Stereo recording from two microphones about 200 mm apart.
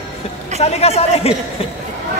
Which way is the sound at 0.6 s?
30° left (ahead or behind).